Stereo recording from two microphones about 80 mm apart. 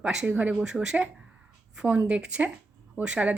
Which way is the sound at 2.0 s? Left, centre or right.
Centre.